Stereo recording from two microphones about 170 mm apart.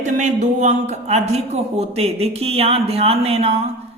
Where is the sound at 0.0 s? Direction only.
45° right (ahead or behind).